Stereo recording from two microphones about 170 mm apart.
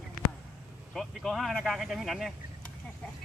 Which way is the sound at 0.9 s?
Centre (ahead or behind).